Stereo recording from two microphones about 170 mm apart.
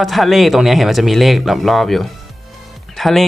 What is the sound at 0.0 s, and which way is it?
Speech, centre (ahead or behind).